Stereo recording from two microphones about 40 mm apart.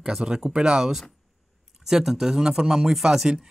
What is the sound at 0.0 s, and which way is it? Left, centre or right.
A man's voice, centre.